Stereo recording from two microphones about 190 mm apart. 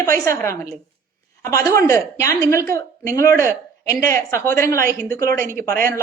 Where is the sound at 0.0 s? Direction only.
15° left (ahead or behind).